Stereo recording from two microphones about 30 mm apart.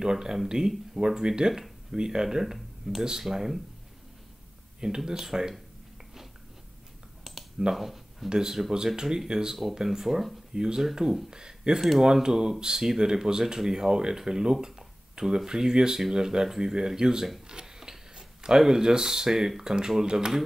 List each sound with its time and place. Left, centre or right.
0.0 s speech: right
4.7 s speech: right
7.3 s computer keyboard: centre
7.7 s speech: centre
8.3 s speech: right
17.5 s a sound: right
17.7 s speech: right